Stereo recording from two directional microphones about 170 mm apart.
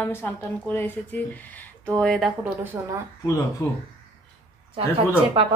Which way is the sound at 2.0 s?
5° left (ahead or behind).